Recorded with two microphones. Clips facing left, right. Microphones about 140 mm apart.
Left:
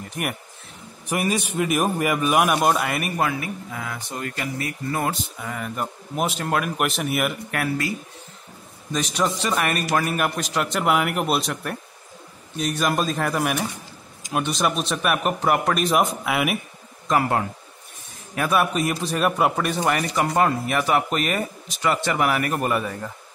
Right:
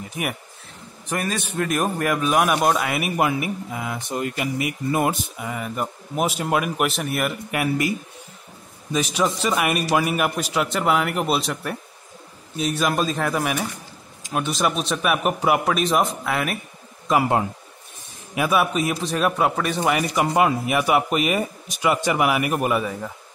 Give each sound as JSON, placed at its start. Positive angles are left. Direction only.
{"t": 0.0, "sound": "speech", "side_deg": 0}
{"t": 1.0, "sound": "speech", "side_deg": 15}
{"t": 3.2, "sound": "speech", "side_deg": -15}
{"t": 7.5, "sound": "speech", "side_deg": -15}
{"t": 8.9, "sound": "speech", "side_deg": 0}
{"t": 17.1, "sound": "speech", "side_deg": -5}
{"t": 18.3, "sound": "speech", "side_deg": -5}